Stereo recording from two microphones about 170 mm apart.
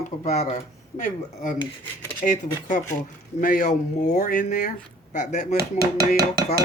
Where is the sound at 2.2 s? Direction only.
50° left (ahead or behind).